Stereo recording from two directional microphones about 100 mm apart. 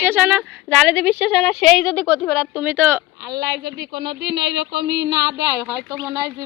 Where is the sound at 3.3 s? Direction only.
45° right (ahead or behind).